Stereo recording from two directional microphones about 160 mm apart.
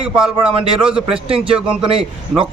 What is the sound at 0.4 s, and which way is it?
Speech, 35° right (ahead or behind).